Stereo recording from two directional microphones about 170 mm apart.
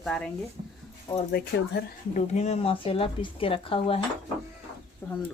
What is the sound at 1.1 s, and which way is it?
Speech, 20° left (ahead or behind).